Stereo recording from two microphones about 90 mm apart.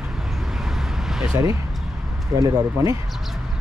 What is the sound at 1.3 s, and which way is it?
Speech, 35° right (ahead or behind).